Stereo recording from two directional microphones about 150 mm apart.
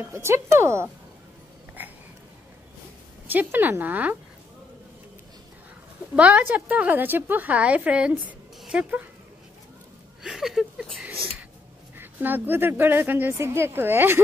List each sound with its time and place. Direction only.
0.0 s a woman's voice: 15° right (ahead or behind)
3.3 s a woman's voice: 10° right (ahead or behind)
6.1 s a woman's voice: 10° right (ahead or behind)
10.2 s speech: centre (ahead or behind)
12.0 s a woman's voice: 15° right (ahead or behind)